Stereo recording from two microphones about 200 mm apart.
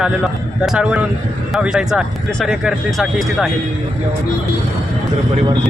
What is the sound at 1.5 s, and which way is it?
Speech, 5° right (ahead or behind).